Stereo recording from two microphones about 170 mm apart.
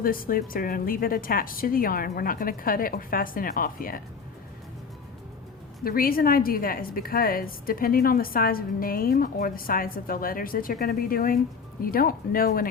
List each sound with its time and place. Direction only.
0.0 s a woman's voice: 55° left (ahead or behind)
5.8 s a woman's voice: 60° left (ahead or behind)